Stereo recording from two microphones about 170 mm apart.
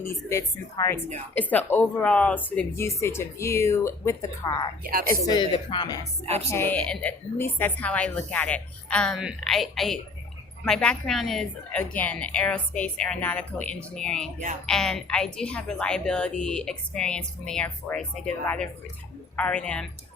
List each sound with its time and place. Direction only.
0.0 s a woman's voice: 15° left (ahead or behind)
4.8 s a woman's voice: 60° right (ahead or behind)
5.2 s a woman's voice: 25° left (ahead or behind)
6.2 s a woman's voice: 40° right (ahead or behind)
6.5 s a woman's voice: 10° left (ahead or behind)